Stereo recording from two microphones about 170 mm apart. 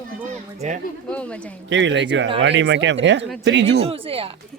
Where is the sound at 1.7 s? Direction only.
90° right.